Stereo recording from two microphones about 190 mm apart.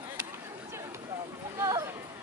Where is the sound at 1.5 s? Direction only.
15° right (ahead or behind).